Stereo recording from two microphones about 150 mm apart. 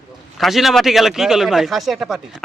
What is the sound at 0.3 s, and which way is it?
A man's voice, centre (ahead or behind).